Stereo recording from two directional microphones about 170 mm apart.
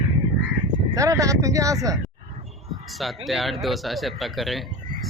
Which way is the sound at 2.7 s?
Centre (ahead or behind).